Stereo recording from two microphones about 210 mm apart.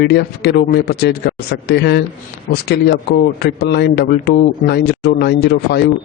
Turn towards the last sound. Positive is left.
turn(degrees=50)  # may be behind; listen again after turning